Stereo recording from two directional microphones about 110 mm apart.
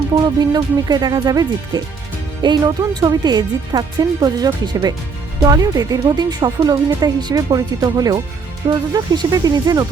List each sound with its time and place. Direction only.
0.3 s speech: 40° right (ahead or behind)